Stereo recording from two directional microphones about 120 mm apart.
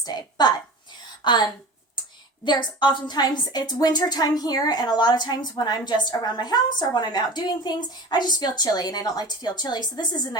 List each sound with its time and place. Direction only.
0.0 s a woman's voice: 35° left (ahead or behind)